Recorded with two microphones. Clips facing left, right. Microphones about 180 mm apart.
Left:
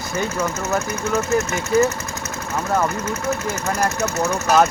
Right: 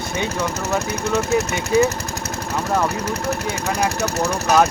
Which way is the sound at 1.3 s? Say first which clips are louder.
Even; 15° right (ahead or behind).